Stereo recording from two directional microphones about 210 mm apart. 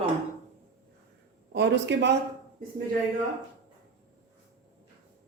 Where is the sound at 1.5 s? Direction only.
55° right (ahead or behind).